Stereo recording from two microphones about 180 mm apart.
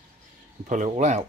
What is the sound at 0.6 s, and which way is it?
Speech, 45° right (ahead or behind).